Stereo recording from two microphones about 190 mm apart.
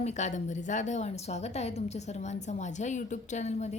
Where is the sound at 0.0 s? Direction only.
35° left (ahead or behind).